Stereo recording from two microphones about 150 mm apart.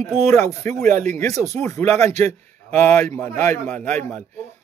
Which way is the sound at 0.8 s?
55° right (ahead or behind).